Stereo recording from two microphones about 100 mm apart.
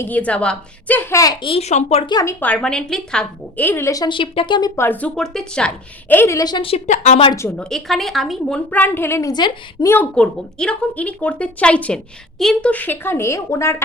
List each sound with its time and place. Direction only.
0.0 s a woman's voice: 15° left (ahead or behind)
1.1 s a woman's voice: 35° left (ahead or behind)
1.4 s speech: 70° left (ahead or behind); by 2.0 s 85° left
2.4 s a woman's voice: 10° left (ahead or behind)
3.7 s speech: 25° left (ahead or behind)
4.1 s speech: 55° left (ahead or behind)
4.8 s a woman's voice: 15° left (ahead or behind)
6.1 s speech: 20° left (ahead or behind)
6.3 s a woman's voice: 40° left (ahead or behind)
6.6 s a woman's voice: 80° left
7.5 s a woman's voice: 5° left (ahead or behind)
8.7 s speech: 20° left (ahead or behind)
10.2 s a woman's voice: 10° left (ahead or behind)
12.7 s speech: 20° left (ahead or behind)